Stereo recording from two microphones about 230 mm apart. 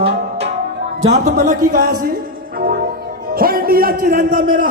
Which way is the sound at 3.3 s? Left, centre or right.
Right.